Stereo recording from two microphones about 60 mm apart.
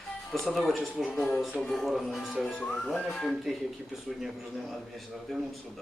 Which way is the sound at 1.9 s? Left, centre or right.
Centre.